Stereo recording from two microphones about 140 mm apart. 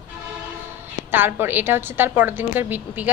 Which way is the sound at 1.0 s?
15° right (ahead or behind).